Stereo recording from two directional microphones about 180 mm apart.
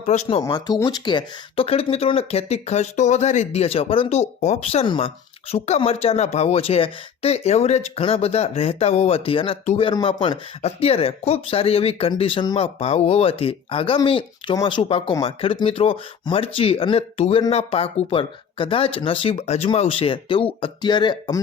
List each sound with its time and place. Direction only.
0.0 s speech: 40° left (ahead or behind)
0.4 s speech: 25° left (ahead or behind)